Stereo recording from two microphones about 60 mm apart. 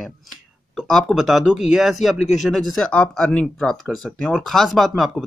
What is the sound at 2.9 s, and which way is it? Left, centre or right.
Speech, left.